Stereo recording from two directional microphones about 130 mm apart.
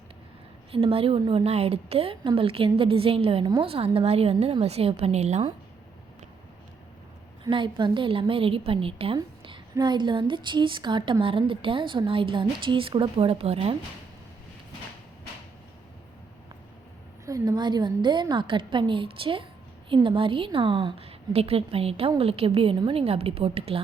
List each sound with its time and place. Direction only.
0.7 s a woman's voice: 45° right (ahead or behind)
7.5 s a woman's voice: 40° right (ahead or behind)
9.1 s a sound: 40° right (ahead or behind)
9.7 s a woman's voice: 35° right (ahead or behind)
17.2 s a woman's voice: 25° right (ahead or behind); by 23.8 s 50° right (ahead or behind)